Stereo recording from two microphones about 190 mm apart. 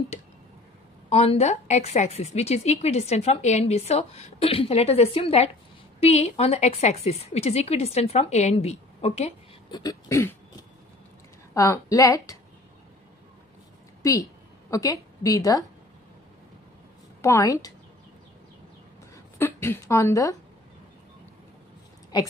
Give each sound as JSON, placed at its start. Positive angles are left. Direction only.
{"t": 1.1, "sound": "a woman's voice", "side_deg": 30}
{"t": 9.7, "sound": "a woman's voice", "side_deg": 20}
{"t": 11.5, "sound": "a woman's voice", "side_deg": 15}
{"t": 14.7, "sound": "a woman's voice", "side_deg": 15}
{"t": 17.2, "sound": "a woman's voice", "side_deg": 15}
{"t": 19.3, "sound": "speech", "side_deg": 10}